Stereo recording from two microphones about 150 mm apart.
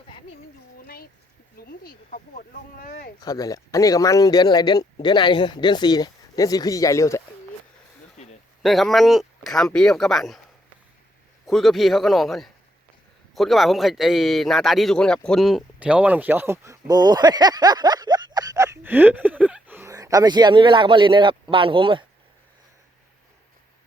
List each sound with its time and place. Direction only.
1.5 s speech: 90° left; by 3.1 s 75° left (ahead or behind)
3.2 s speech: 25° left (ahead or behind)
8.6 s speech: centre (ahead or behind)
11.4 s speech: centre (ahead or behind); by 22.0 s 35° right (ahead or behind)